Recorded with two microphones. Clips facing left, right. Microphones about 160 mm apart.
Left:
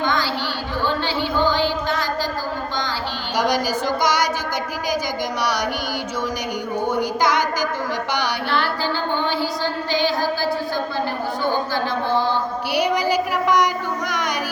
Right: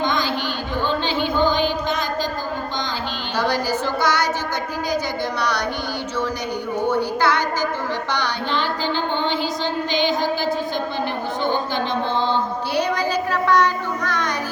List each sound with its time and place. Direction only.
0.0 s chatter: 20° right (ahead or behind)
0.9 s a sound: 20° right (ahead or behind)
3.3 s a woman's voice: 15° left (ahead or behind)
6.9 s a woman's voice: 15° left (ahead or behind)
12.1 s music: 20° right (ahead or behind)
12.7 s a sound: 10° left (ahead or behind)